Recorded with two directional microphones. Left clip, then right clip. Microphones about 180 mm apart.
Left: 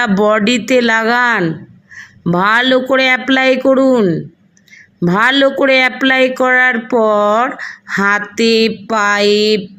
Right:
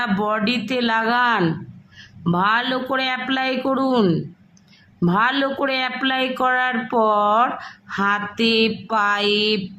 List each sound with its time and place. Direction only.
0.2 s a woman's voice: 30° left (ahead or behind)
3.9 s speech: 5° left (ahead or behind)
4.9 s a woman's voice: 25° left (ahead or behind)